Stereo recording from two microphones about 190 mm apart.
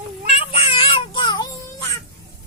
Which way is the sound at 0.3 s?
30° left (ahead or behind).